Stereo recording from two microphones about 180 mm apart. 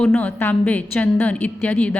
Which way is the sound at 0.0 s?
5° left (ahead or behind).